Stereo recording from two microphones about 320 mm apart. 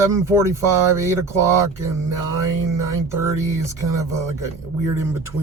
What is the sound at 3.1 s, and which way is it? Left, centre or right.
Speech, centre.